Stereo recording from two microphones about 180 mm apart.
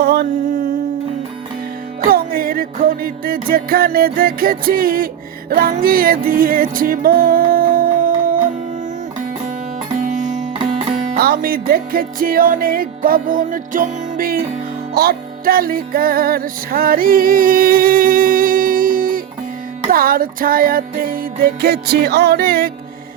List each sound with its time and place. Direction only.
0.0 s mantra: 60° right (ahead or behind)
2.0 s music: 55° right (ahead or behind)
9.9 s music: 45° right (ahead or behind)
11.2 s music: 55° right (ahead or behind)